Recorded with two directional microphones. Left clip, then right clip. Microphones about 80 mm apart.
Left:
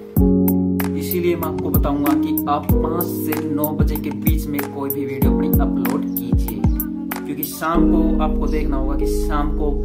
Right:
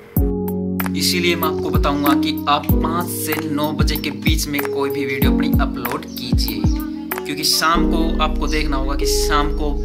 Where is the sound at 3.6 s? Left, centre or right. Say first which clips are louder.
Right 2 dB; left.